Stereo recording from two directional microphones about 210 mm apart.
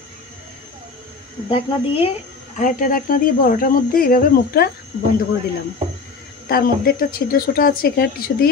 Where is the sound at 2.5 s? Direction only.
40° left (ahead or behind).